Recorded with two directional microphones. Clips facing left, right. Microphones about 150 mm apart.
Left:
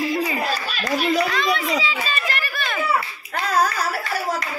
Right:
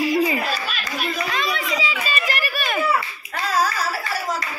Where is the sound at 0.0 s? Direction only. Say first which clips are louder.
Right 3 dB; 15° right (ahead or behind).